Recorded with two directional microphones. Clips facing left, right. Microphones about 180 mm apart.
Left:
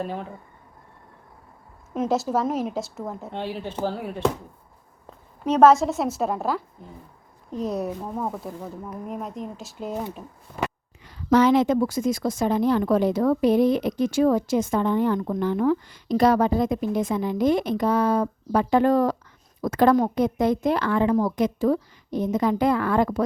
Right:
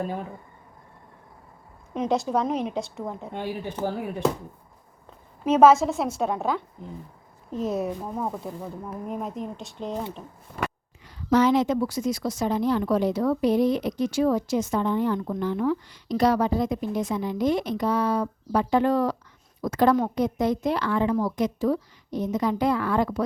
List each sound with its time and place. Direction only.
1.9 s a woman's voice: 5° left (ahead or behind)
3.3 s speech: 15° right (ahead or behind)
5.5 s a woman's voice: centre (ahead or behind)
11.3 s a woman's voice: 65° left (ahead or behind)